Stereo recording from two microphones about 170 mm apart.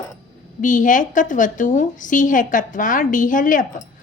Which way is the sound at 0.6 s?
50° left (ahead or behind).